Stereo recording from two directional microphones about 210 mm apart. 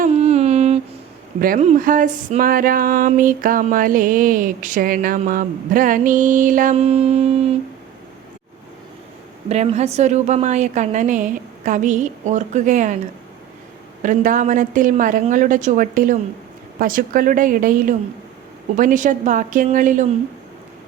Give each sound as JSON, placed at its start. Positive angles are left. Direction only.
{"t": 0.0, "sound": "a sound", "side_deg": -30}
{"t": 1.4, "sound": "speech", "side_deg": -40}
{"t": 9.5, "sound": "speech", "side_deg": -30}
{"t": 14.0, "sound": "speech", "side_deg": -40}